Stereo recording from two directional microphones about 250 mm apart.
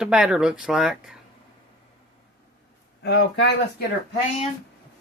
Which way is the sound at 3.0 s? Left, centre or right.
Left.